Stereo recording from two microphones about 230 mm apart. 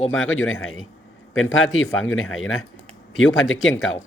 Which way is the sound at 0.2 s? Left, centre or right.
Left.